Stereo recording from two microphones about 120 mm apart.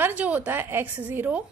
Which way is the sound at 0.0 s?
10° right (ahead or behind).